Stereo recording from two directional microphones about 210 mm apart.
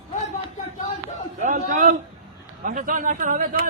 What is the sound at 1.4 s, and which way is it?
A man's voice, 35° right (ahead or behind).